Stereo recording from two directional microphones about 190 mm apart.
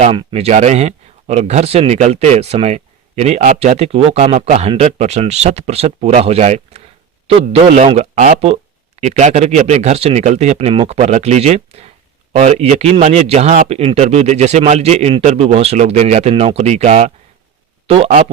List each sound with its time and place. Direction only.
0.0 s speech: 25° right (ahead or behind)